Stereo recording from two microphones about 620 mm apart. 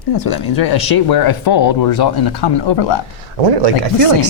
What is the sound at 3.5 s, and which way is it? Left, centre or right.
Speech, right.